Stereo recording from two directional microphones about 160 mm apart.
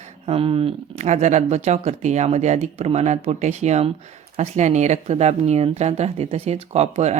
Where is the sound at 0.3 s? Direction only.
35° right (ahead or behind).